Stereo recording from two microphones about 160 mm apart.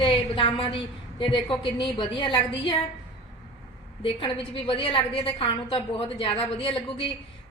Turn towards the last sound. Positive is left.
turn(degrees=35)  # may be behind; listen again after turning